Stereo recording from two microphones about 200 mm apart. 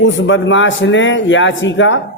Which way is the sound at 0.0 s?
70° left (ahead or behind).